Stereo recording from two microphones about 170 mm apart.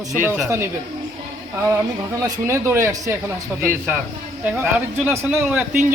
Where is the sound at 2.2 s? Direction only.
15° right (ahead or behind).